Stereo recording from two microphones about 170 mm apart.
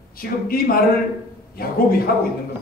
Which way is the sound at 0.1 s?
60° left (ahead or behind).